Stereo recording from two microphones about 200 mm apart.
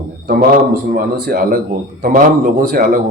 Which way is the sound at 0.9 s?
50° right (ahead or behind).